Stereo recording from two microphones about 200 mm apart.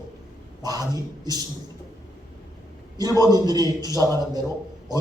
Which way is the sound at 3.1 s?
20° right (ahead or behind).